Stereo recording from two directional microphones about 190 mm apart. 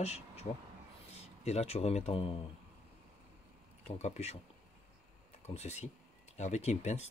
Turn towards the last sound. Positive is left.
turn(degrees=35)  # may be behind; listen again after turning